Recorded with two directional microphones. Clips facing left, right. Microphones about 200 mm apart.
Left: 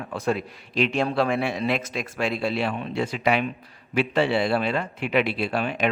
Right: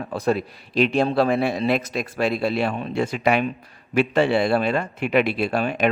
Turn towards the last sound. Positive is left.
turn(degrees=-45)  # may be behind; listen again after turning